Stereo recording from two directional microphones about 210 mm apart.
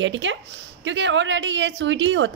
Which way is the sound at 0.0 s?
60° right (ahead or behind).